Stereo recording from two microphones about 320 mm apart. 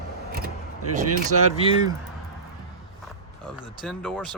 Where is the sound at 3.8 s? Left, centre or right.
Centre.